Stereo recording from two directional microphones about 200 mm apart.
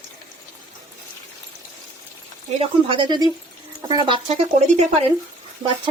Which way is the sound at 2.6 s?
25° right (ahead or behind).